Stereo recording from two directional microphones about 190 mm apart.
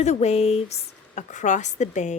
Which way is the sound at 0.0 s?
35° left (ahead or behind).